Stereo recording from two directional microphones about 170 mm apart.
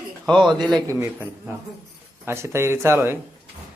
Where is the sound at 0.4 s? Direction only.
25° right (ahead or behind).